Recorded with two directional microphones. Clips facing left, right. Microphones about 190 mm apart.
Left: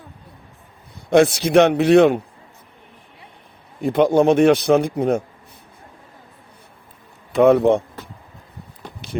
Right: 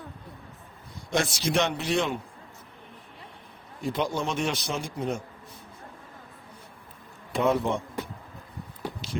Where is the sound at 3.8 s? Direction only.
55° left (ahead or behind).